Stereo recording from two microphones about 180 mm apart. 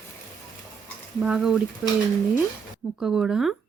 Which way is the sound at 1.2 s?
5° right (ahead or behind).